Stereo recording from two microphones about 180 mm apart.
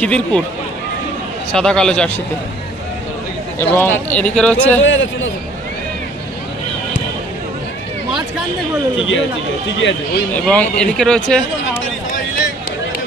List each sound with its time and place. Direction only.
0.0 s speech: 5° left (ahead or behind)
1.5 s speech: 5° left (ahead or behind)
3.5 s speech: 10° left (ahead or behind)
4.8 s a man's voice: 90° left
9.8 s a man's voice: 90° left
10.3 s speech: 5° left (ahead or behind)